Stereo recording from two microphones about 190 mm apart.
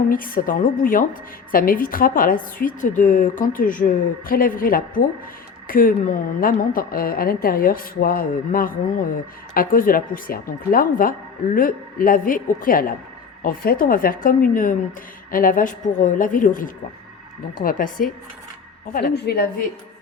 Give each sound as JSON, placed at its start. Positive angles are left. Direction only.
{"t": 0.1, "sound": "a woman's voice", "side_deg": 50}